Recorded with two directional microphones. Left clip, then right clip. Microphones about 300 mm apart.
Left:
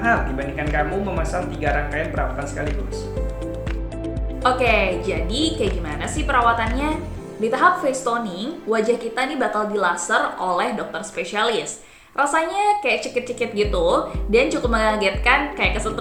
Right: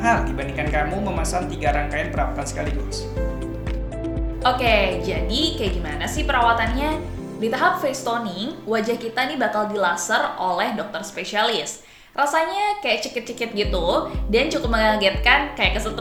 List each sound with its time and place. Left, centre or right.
0.0 s a woman's voice: right
4.4 s a woman's voice: centre